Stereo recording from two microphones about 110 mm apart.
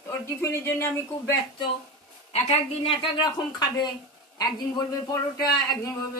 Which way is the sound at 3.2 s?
40° left (ahead or behind).